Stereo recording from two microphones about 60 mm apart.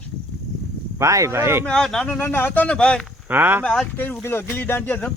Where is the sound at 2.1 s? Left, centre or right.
Left.